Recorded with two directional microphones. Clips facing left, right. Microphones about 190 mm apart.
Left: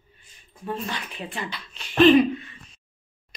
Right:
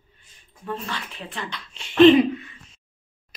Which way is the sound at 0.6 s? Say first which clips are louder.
Left 1 dB; 15° left (ahead or behind).